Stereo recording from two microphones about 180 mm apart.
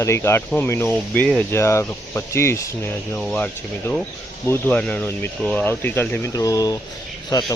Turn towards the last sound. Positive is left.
turn(degrees=20)  # may be behind; listen again after turning